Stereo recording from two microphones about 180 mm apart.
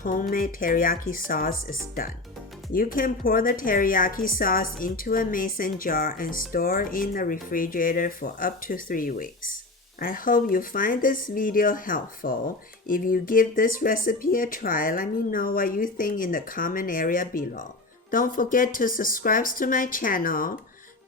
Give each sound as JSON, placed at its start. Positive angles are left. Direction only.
{"t": 0.0, "sound": "speech", "side_deg": 50}
{"t": 2.7, "sound": "speech", "side_deg": 50}